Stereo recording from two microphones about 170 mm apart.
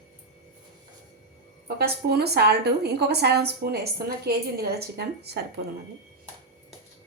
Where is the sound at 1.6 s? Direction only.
70° right (ahead or behind).